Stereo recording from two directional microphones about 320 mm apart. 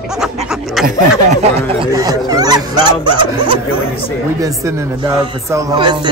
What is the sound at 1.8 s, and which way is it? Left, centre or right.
Speech, centre.